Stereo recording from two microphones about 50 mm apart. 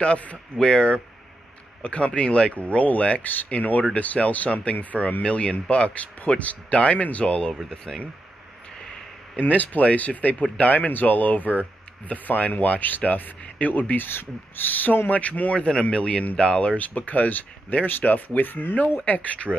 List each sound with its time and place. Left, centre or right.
0.0 s speech: left
7.9 s speech: centre
9.4 s speech: left
19.0 s speech: left